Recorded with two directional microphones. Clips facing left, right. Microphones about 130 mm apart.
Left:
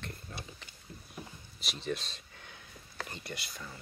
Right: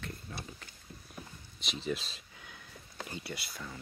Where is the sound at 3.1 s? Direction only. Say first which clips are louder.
Right 2 dB; 5° right (ahead or behind).